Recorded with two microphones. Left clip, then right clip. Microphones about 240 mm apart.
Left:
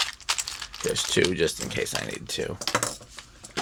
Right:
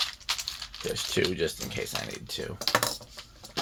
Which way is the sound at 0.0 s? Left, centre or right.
Left.